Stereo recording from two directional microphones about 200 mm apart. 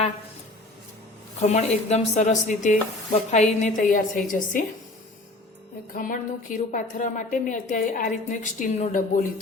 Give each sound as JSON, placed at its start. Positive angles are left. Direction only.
{"t": 1.4, "sound": "a woman's voice", "side_deg": 35}
{"t": 5.9, "sound": "a woman's voice", "side_deg": 45}